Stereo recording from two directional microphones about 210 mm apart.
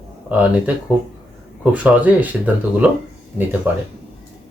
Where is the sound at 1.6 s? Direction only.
10° right (ahead or behind).